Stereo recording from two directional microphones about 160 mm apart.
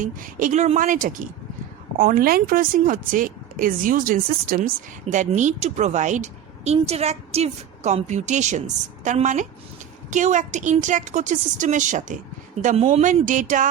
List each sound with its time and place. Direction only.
0.0 s a woman's voice: 55° right (ahead or behind)
12.6 s a woman's voice: 40° right (ahead or behind)